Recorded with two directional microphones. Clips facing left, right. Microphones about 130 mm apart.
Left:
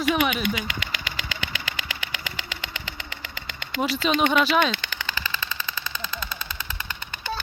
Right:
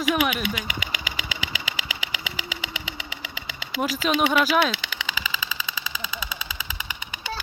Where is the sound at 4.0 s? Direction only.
5° right (ahead or behind).